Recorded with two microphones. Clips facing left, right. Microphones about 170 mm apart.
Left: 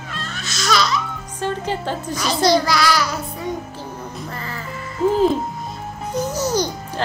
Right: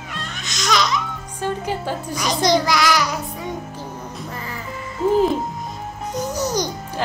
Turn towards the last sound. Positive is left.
turn(degrees=-15)  # may be behind; listen again after turning